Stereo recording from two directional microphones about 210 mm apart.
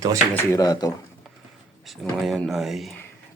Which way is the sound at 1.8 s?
Centre (ahead or behind).